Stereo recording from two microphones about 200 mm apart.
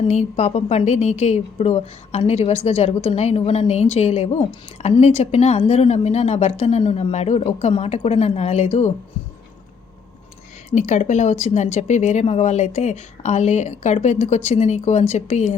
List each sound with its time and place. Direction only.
0.1 s a woman's voice: 35° left (ahead or behind)
10.7 s a woman's voice: 35° left (ahead or behind)